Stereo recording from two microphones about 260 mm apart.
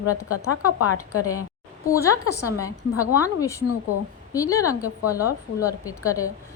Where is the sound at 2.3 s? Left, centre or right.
Centre.